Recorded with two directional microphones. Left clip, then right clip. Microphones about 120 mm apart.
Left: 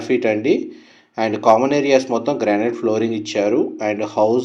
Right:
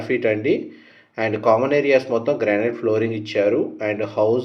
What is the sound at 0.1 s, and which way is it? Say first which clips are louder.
Speech: left 2 dB; 40° left (ahead or behind).